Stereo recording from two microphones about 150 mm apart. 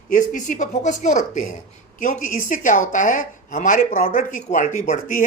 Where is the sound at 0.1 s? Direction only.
55° left (ahead or behind).